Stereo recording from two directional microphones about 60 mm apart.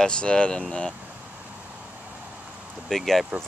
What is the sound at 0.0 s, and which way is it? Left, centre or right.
Speech, centre.